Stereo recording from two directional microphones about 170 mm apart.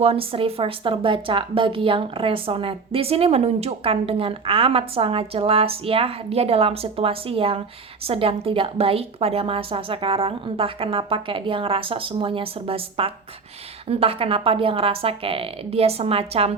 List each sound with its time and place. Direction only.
0.0 s speech: 35° right (ahead or behind)